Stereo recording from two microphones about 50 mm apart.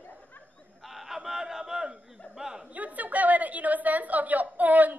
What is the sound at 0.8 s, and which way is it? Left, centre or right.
Battle cry, centre.